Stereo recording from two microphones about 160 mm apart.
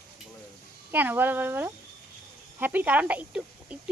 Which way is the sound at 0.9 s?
10° right (ahead or behind).